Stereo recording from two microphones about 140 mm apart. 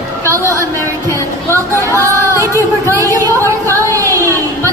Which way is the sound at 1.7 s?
20° left (ahead or behind).